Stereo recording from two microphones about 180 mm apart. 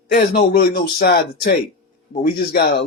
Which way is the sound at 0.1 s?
55° left (ahead or behind).